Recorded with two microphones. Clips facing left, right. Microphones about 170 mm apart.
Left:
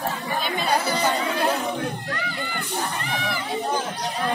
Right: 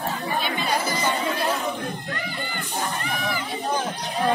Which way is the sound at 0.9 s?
65° left (ahead or behind).